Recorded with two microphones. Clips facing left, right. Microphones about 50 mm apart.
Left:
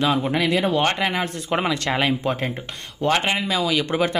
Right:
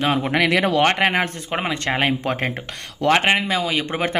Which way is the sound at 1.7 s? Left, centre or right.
Right.